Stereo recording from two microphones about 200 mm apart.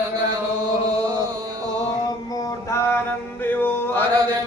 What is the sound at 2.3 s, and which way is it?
Mantra, 20° left (ahead or behind).